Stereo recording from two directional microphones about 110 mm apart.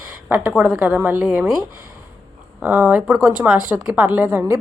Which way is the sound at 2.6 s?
15° right (ahead or behind).